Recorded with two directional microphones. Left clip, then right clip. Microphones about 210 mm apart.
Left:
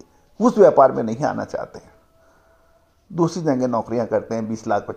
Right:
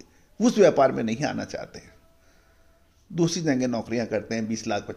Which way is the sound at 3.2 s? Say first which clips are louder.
Left 5 dB; 5° left (ahead or behind).